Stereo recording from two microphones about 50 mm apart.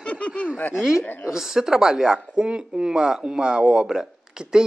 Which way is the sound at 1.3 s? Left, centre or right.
Centre.